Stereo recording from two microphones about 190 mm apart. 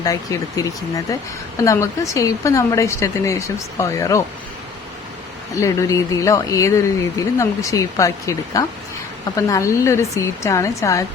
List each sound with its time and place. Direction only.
0.0 s speech: 20° left (ahead or behind)
5.5 s speech: 15° left (ahead or behind)